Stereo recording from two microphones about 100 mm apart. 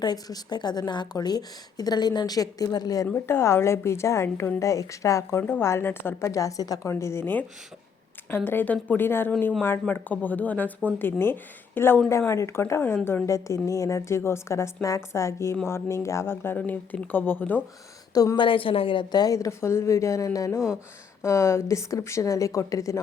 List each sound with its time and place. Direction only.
0.0 s a woman's voice: 45° left (ahead or behind)
3.1 s a woman's voice: 25° left (ahead or behind)
5.4 s speech: 20° left (ahead or behind); by 6.9 s 35° left (ahead or behind)
6.9 s speech: 25° left (ahead or behind)
8.4 s a woman's voice: 20° left (ahead or behind)
18.1 s a woman's voice: 40° left (ahead or behind)
18.3 s a woman's voice: 60° left (ahead or behind); by 23.0 s 30° left (ahead or behind)